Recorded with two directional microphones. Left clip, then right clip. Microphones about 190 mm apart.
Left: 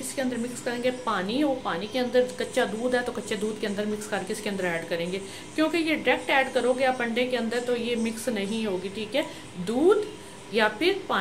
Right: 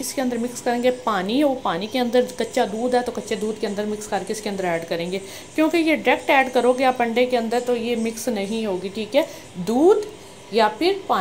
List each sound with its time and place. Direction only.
0.1 s a woman's voice: 30° right (ahead or behind)
10.5 s a woman's voice: 20° right (ahead or behind)